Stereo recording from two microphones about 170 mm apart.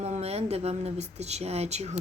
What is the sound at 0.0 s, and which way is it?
Speech, 40° right (ahead or behind).